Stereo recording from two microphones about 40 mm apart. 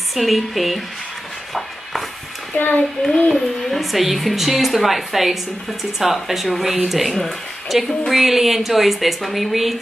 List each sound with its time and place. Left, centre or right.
0.1 s speech: centre
2.5 s a child's voice: left
3.3 s speech: centre
7.7 s speech: centre